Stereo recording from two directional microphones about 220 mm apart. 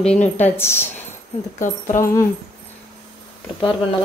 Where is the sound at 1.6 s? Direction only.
35° left (ahead or behind).